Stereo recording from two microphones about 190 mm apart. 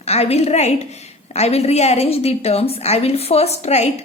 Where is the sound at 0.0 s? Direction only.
35° left (ahead or behind).